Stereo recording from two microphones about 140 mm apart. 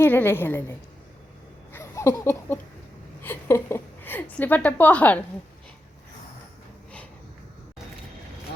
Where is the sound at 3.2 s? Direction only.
15° left (ahead or behind).